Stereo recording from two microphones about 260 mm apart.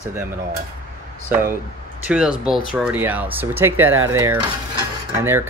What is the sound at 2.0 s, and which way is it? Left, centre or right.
A man's voice, centre.